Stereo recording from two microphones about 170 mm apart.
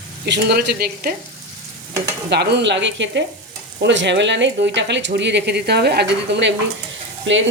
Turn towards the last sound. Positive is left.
turn(degrees=-90)